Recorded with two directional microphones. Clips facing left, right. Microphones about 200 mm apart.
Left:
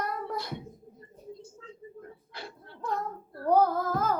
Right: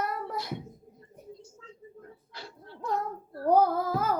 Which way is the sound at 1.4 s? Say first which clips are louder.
Left 3 dB; 55° left (ahead or behind).